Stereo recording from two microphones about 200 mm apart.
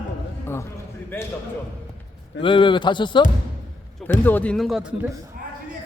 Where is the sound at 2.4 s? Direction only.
25° left (ahead or behind).